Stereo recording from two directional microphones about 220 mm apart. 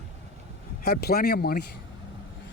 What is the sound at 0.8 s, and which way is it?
Speech, 45° left (ahead or behind).